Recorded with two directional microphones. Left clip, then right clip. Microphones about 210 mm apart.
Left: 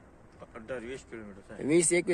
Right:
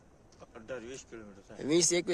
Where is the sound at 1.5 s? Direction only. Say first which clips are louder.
Left 2 dB; 15° right (ahead or behind).